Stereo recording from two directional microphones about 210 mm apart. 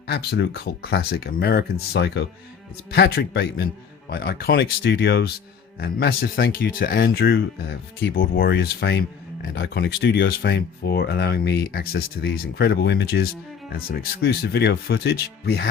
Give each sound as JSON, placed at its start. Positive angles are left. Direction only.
{"t": 0.1, "sound": "speech", "side_deg": 50}